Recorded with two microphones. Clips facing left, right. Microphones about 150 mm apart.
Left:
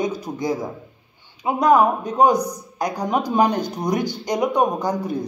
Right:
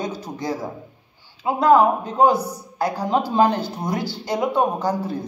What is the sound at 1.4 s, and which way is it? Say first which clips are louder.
A man's voice: right 1 dB; 15° left (ahead or behind).